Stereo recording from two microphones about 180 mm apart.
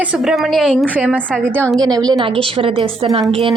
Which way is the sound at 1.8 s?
20° right (ahead or behind).